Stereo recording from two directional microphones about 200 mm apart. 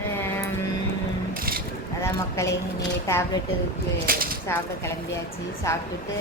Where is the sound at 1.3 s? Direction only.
45° right (ahead or behind).